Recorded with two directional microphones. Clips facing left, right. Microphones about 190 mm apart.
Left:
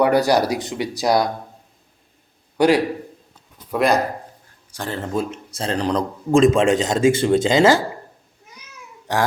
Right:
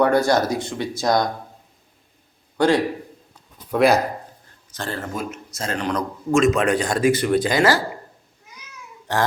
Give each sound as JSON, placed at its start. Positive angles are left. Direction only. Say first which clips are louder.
{"t": 0.0, "sound": "speech", "louder": "left 1 dB", "side_deg": 15}
{"t": 2.6, "sound": "speech", "louder": "left 2 dB", "side_deg": 15}
{"t": 3.7, "sound": "speech", "louder": "right 2 dB", "side_deg": 0}
{"t": 5.1, "sound": "a man's voice", "louder": "left 5 dB", "side_deg": 30}